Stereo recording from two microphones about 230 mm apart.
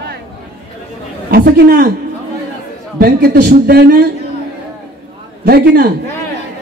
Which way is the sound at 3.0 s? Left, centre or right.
Right.